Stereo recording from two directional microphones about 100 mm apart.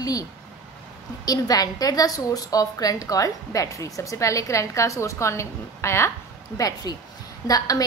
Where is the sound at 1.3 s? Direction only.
40° left (ahead or behind).